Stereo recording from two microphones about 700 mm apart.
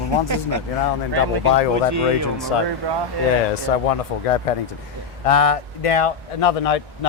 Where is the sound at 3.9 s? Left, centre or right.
Left.